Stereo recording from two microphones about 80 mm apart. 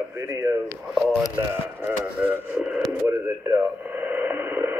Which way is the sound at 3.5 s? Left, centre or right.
Right.